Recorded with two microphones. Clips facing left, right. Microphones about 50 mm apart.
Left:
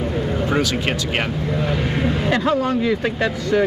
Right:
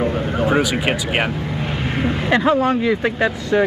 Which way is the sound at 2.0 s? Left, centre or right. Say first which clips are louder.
Right 3 dB; centre.